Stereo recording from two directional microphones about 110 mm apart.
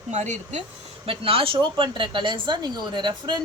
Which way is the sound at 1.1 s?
55° right (ahead or behind).